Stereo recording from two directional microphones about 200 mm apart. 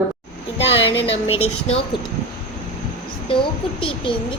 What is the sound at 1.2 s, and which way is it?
Speech, 90° left.